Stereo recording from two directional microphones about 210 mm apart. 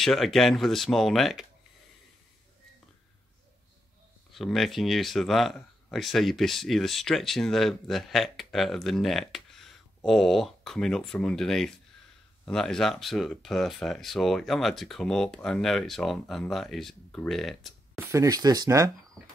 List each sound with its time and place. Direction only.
0.0 s speech: centre (ahead or behind)
4.3 s speech: centre (ahead or behind)
17.9 s speech: 15° right (ahead or behind)